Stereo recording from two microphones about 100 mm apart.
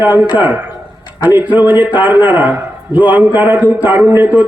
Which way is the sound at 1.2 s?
20° right (ahead or behind).